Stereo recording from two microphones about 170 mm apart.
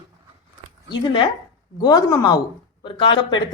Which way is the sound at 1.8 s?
20° left (ahead or behind).